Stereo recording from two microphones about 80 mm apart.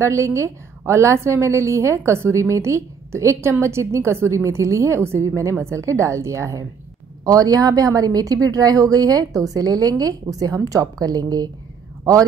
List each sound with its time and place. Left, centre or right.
0.0 s a woman's voice: right
7.2 s a woman's voice: right